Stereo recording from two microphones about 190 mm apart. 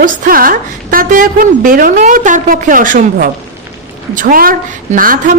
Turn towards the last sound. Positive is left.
turn(degrees=-45)  # may be behind; listen again after turning